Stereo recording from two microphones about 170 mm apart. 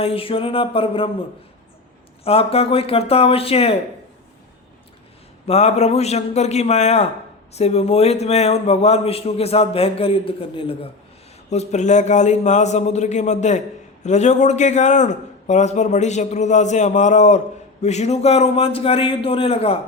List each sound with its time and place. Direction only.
0.0 s a man's voice: 35° left (ahead or behind)
2.2 s a man's voice: 35° left (ahead or behind)
5.5 s a man's voice: 40° left (ahead or behind)